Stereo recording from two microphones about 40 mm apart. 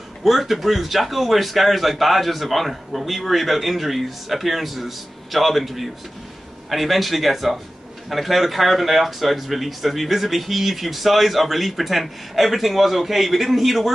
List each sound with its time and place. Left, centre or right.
0.2 s speech: centre